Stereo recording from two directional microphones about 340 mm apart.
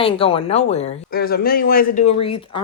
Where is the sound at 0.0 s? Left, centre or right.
Centre.